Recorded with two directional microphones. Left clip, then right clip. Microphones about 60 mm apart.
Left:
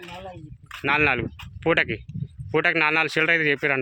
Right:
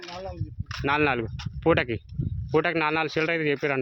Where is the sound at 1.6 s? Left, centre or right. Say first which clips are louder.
Left 1 dB; right.